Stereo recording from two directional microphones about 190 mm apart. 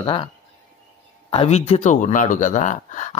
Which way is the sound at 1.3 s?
35° left (ahead or behind).